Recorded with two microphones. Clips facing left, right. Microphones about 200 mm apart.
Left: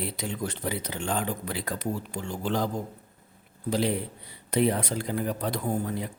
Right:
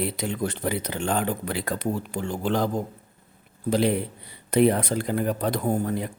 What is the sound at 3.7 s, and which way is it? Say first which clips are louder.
A man's voice: right 4 dB; 55° right (ahead or behind).